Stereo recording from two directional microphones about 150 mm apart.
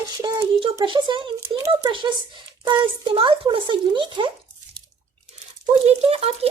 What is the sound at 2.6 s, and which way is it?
Speech, 30° right (ahead or behind).